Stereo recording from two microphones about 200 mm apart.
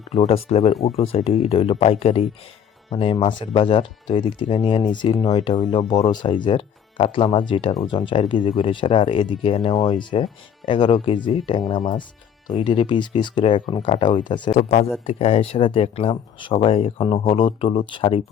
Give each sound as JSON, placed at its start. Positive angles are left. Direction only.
{"t": 0.1, "sound": "speech", "side_deg": 30}
{"t": 14.5, "sound": "a man's voice", "side_deg": 35}